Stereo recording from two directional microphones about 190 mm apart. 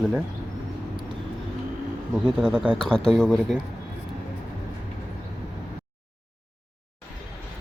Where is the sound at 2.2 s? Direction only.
5° right (ahead or behind).